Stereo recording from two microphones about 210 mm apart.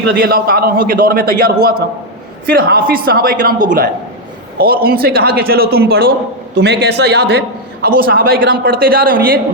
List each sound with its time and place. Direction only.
0.1 s a man's voice: 45° right (ahead or behind)